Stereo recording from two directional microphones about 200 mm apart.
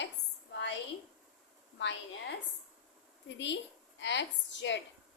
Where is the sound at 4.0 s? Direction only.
65° left (ahead or behind).